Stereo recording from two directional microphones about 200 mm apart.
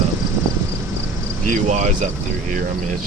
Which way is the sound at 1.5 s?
35° right (ahead or behind).